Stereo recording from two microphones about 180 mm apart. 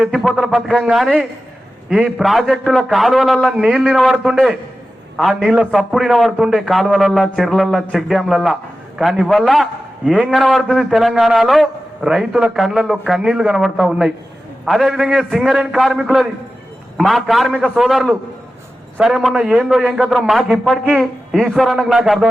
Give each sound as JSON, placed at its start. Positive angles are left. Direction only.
{"t": 0.0, "sound": "a man's voice", "side_deg": 0}